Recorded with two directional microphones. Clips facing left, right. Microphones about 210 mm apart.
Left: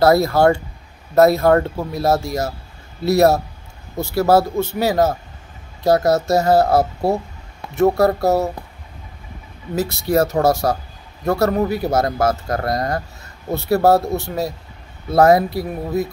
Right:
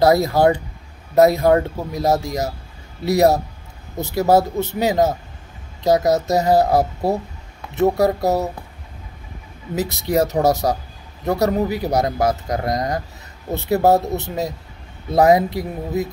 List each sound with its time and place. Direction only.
0.0 s speech: 15° right (ahead or behind)
8.0 s speech: 15° right (ahead or behind)
9.8 s speech: 20° right (ahead or behind)